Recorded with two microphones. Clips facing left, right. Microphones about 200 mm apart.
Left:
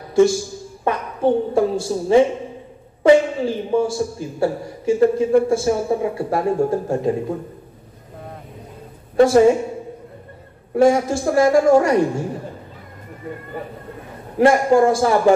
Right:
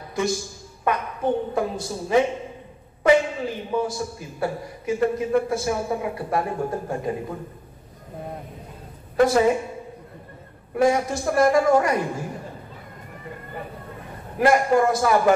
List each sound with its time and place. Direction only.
0.8 s a woman's voice: 30° left (ahead or behind)
9.1 s a woman's voice: 30° left (ahead or behind)
10.7 s a man's voice: 30° left (ahead or behind)
14.4 s a man's voice: 30° left (ahead or behind)